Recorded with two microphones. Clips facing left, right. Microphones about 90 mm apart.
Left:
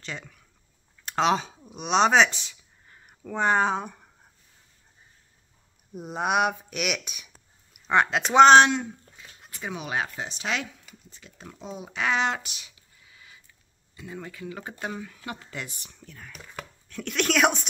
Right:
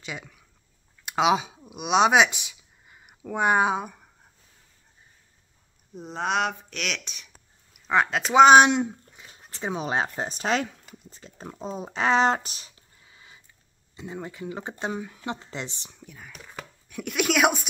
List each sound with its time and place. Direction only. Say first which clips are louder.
0.0 s a sound: right 1 dB; 5° right (ahead or behind)
1.0 s speech: right 1 dB; 10° right (ahead or behind)
5.9 s speech: left 2 dB; 10° left (ahead or behind); by 15.9 s 25° right (ahead or behind)
15.9 s speech: right 1 dB; 10° right (ahead or behind)